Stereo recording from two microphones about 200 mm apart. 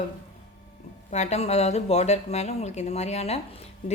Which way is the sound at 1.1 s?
35° left (ahead or behind).